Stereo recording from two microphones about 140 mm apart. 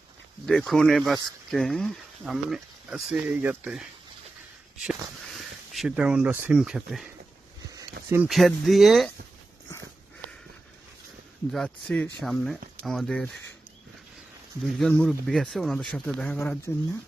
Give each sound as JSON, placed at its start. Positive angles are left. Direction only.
{"t": 0.4, "sound": "speech", "side_deg": 0}
{"t": 5.3, "sound": "speech", "side_deg": 0}
{"t": 8.0, "sound": "a sound", "side_deg": -90}
{"t": 8.3, "sound": "speech", "side_deg": 0}
{"t": 11.5, "sound": "speech", "side_deg": 5}
{"t": 14.6, "sound": "speech", "side_deg": 0}
{"t": 16.7, "sound": "speech", "side_deg": 20}